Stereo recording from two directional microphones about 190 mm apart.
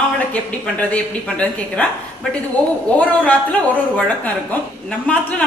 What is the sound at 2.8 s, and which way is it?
A woman's voice, 10° left (ahead or behind).